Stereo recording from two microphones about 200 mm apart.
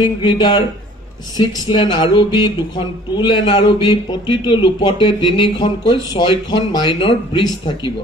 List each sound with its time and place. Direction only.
0.0 s a man's voice: 20° left (ahead or behind)